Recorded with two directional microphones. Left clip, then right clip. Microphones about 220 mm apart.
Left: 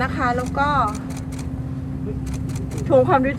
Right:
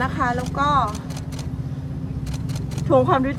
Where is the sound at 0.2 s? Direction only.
10° right (ahead or behind).